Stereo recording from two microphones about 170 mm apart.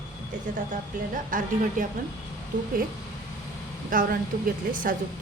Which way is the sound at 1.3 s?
50° right (ahead or behind).